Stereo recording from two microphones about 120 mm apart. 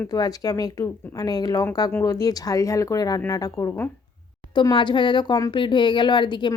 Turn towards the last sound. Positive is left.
turn(degrees=40)  # may be behind; listen again after turning